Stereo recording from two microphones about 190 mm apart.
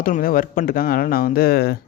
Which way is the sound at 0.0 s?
50° left (ahead or behind).